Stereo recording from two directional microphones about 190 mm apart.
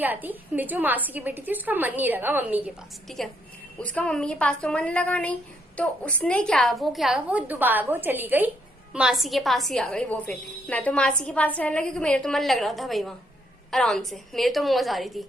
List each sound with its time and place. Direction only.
0.0 s a woman's voice: 10° right (ahead or behind)